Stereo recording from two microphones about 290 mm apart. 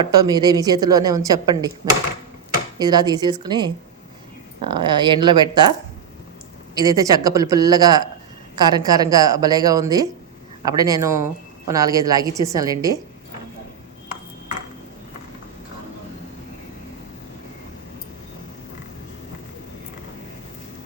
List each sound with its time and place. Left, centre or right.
0.0 s a woman's voice: centre
6.7 s a woman's voice: centre